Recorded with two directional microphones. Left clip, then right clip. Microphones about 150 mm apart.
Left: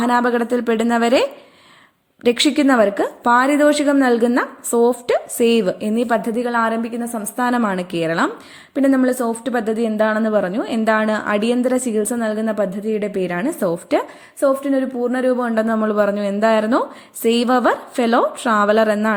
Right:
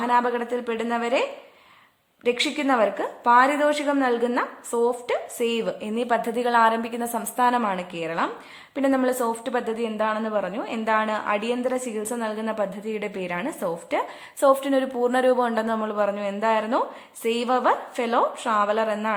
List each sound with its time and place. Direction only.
0.0 s a woman's voice: 30° left (ahead or behind); by 7.3 s 5° left (ahead or behind)
7.3 s a woman's voice: 20° left (ahead or behind)
8.7 s a woman's voice: 15° left (ahead or behind)
14.4 s a woman's voice: centre (ahead or behind); by 19.1 s 35° left (ahead or behind)